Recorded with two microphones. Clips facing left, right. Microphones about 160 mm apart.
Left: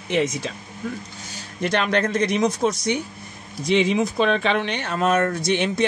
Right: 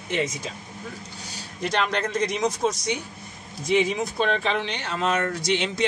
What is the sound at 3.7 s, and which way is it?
Speech, 85° left.